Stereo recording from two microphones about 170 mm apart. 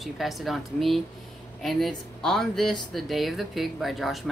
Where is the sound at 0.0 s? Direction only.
Centre (ahead or behind).